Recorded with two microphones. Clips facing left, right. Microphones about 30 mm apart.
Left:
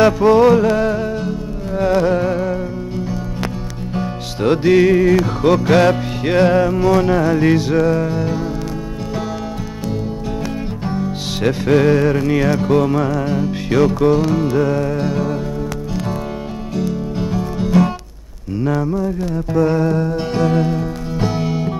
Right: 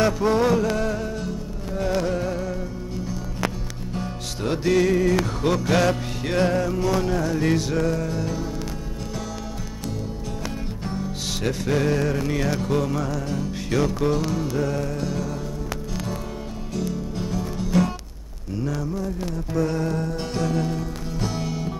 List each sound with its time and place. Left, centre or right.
0.2 s music: left
3.9 s music: left
7.3 s music: left
11.4 s music: left
16.7 s music: left